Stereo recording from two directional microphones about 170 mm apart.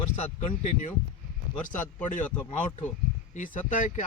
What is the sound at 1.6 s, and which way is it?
Speech, 50° left (ahead or behind).